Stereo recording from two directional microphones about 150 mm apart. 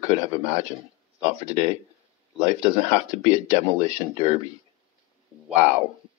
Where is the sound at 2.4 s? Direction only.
40° right (ahead or behind).